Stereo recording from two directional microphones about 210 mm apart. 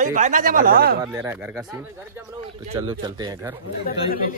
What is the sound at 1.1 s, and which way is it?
Speech, 10° right (ahead or behind).